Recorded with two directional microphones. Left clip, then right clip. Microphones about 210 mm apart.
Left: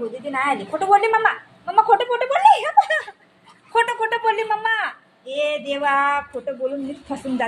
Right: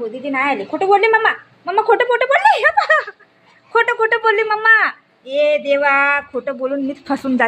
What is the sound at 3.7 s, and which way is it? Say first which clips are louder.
A woman's voice: right 5 dB; 30° right (ahead or behind).